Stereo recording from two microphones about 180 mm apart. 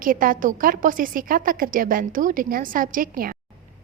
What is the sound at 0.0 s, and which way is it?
A woman's voice, 50° right (ahead or behind).